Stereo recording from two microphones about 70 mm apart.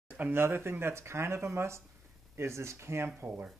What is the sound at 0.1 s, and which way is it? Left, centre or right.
Speech, right.